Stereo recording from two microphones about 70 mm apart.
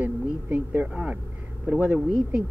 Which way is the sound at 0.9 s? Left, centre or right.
Centre.